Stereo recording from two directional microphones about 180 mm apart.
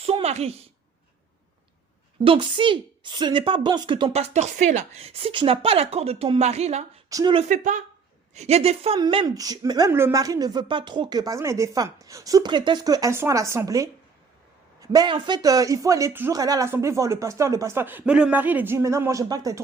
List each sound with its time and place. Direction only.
0.0 s a sound: 35° right (ahead or behind)
2.2 s a woman's voice: 30° right (ahead or behind)
7.1 s a woman's voice: 20° right (ahead or behind)
7.3 s a woman's voice: 45° right (ahead or behind); by 19.6 s 20° right (ahead or behind)